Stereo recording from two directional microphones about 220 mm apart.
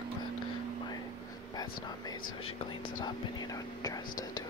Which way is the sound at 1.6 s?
15° left (ahead or behind).